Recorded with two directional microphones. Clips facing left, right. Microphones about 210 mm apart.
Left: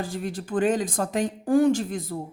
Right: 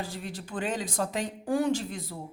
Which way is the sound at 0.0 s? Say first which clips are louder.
Left 6 dB; 45° left (ahead or behind).